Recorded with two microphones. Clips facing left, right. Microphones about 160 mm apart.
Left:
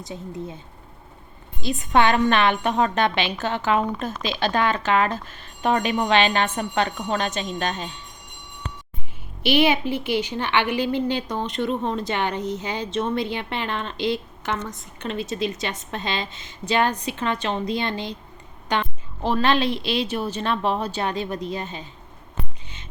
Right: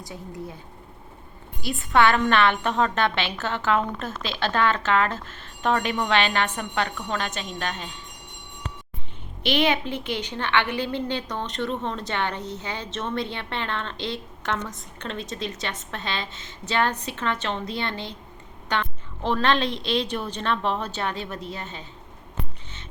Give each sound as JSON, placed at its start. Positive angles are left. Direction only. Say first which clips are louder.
{"t": 0.0, "sound": "speech", "louder": "left 3 dB", "side_deg": 20}
{"t": 1.6, "sound": "a woman's voice", "louder": "left 1 dB", "side_deg": 20}
{"t": 9.4, "sound": "a woman's voice", "louder": "left 3 dB", "side_deg": 10}